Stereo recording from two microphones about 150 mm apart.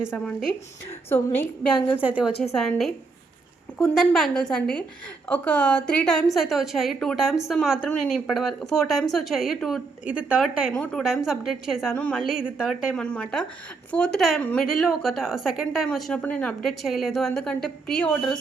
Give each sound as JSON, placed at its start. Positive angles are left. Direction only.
{"t": 0.3, "sound": "a woman's voice", "side_deg": 5}
{"t": 1.1, "sound": "a woman's voice", "side_deg": 15}
{"t": 2.0, "sound": "a woman's voice", "side_deg": -10}
{"t": 2.6, "sound": "a woman's voice", "side_deg": 5}
{"t": 3.9, "sound": "a woman's voice", "side_deg": 0}
{"t": 12.9, "sound": "a woman's voice", "side_deg": 5}